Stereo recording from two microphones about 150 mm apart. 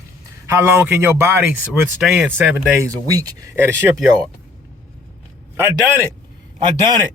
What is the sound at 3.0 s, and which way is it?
Speech, 25° right (ahead or behind).